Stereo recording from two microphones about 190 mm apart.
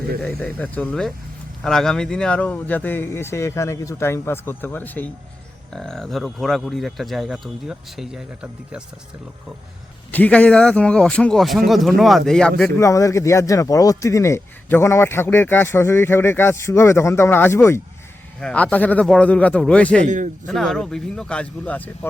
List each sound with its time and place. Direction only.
0.2 s speech: 5° left (ahead or behind)
10.1 s speech: 10° left (ahead or behind)
12.8 s speech: 15° left (ahead or behind)
20.1 s a man's voice: 40° right (ahead or behind)
20.5 s speech: centre (ahead or behind)